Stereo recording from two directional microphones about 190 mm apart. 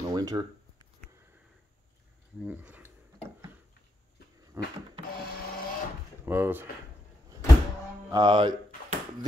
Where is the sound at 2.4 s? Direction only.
5° right (ahead or behind).